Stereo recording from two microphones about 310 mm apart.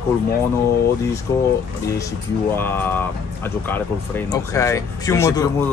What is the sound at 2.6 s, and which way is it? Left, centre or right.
Speech, centre.